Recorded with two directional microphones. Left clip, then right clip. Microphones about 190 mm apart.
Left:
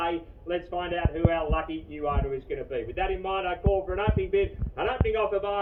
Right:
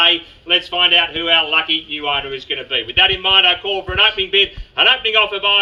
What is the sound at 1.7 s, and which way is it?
Speech, 35° left (ahead or behind).